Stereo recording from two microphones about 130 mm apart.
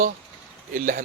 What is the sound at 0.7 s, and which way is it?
Speech, 90° right.